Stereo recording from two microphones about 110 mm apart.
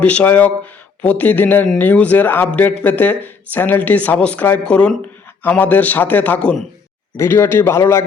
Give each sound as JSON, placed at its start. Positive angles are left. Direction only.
{"t": 0.0, "sound": "speech", "side_deg": 10}
{"t": 7.2, "sound": "speech", "side_deg": 20}